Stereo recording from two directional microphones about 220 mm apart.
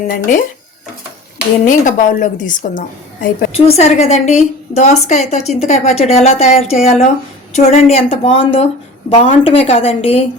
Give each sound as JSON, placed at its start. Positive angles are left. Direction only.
{"t": 1.6, "sound": "a woman's voice", "side_deg": 35}